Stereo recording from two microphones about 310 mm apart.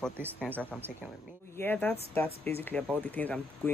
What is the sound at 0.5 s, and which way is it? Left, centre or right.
Speech, centre.